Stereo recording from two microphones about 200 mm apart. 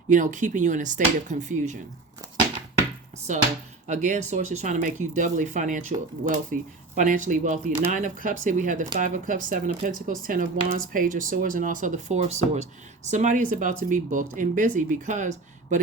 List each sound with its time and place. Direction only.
0.1 s speech: 40° right (ahead or behind)
3.8 s speech: 40° right (ahead or behind)